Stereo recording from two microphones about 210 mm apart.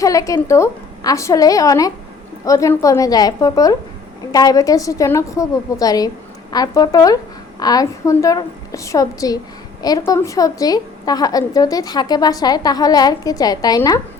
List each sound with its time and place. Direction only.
0.0 s a woman's voice: 15° left (ahead or behind)